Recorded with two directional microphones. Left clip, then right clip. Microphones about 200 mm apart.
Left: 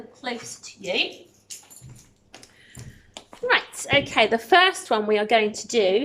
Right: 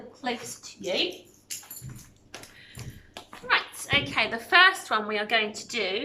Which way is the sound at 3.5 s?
35° left (ahead or behind).